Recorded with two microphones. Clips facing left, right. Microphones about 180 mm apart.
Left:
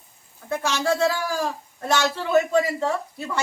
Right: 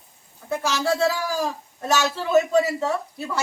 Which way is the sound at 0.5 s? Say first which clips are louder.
Even; centre (ahead or behind).